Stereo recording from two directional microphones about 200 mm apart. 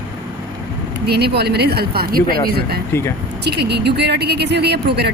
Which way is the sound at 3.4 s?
55° right (ahead or behind).